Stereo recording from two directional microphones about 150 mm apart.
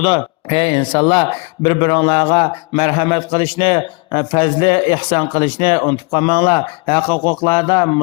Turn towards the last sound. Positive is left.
turn(degrees=30)  # may be behind; listen again after turning